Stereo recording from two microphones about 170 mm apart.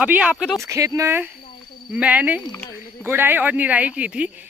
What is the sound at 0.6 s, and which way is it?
Speech, 20° right (ahead or behind).